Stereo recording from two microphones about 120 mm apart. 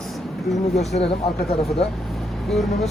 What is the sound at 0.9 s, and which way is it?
Speech, 55° left (ahead or behind).